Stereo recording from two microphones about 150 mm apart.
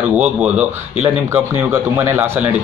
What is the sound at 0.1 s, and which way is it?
Speech, 10° right (ahead or behind).